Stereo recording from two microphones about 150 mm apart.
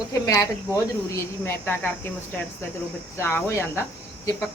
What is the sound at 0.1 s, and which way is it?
Speech, 20° left (ahead or behind).